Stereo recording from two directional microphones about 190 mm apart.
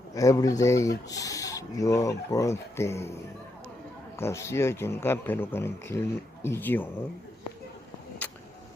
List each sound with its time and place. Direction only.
0.1 s speech: 20° left (ahead or behind)
4.2 s speech: 15° left (ahead or behind)